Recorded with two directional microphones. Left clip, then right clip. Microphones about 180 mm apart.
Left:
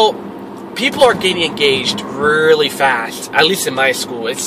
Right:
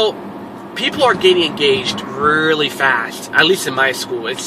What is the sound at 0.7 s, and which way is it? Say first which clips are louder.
Speech: left 3 dB; centre (ahead or behind).